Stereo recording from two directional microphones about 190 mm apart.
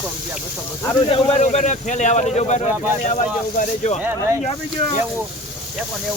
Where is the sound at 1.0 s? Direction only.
30° left (ahead or behind).